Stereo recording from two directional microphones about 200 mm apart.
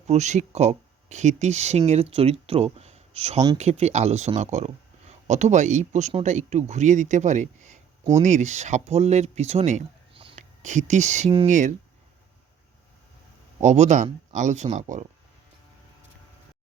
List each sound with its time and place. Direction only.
0.1 s speech: 35° right (ahead or behind)
13.6 s speech: 35° right (ahead or behind)